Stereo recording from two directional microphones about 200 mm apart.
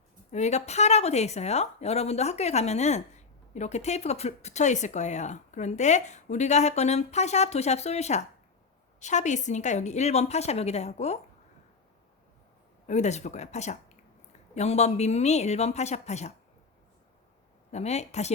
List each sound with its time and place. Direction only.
0.3 s a woman's voice: 35° left (ahead or behind)
12.9 s a woman's voice: 35° left (ahead or behind)
17.7 s a woman's voice: 35° left (ahead or behind)